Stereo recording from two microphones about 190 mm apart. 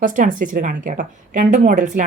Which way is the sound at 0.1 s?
45° right (ahead or behind).